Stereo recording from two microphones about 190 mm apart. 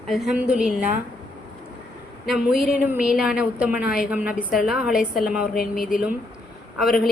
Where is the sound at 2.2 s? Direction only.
Centre (ahead or behind).